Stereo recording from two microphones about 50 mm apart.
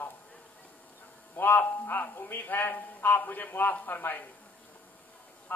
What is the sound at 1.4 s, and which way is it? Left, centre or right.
Speech, left.